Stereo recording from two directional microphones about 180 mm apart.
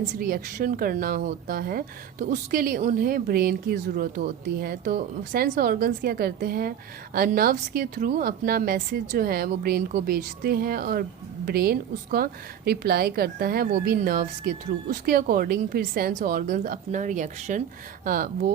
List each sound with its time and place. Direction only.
0.2 s speech: 55° right (ahead or behind)